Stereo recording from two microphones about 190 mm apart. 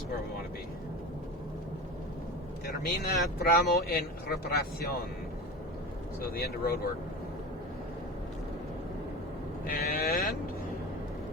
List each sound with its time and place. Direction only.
2.6 s speech: 55° left (ahead or behind)
6.3 s livestock: 50° left (ahead or behind)
9.6 s livestock: 50° left (ahead or behind)